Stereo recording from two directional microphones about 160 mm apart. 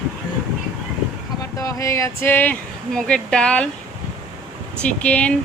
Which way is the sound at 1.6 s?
20° left (ahead or behind).